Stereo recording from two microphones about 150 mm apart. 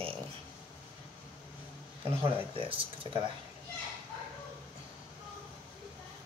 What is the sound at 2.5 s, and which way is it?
Speech, 35° right (ahead or behind).